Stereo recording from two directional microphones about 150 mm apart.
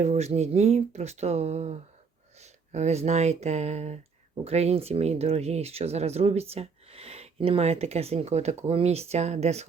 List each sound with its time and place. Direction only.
0.0 s speech: 45° right (ahead or behind)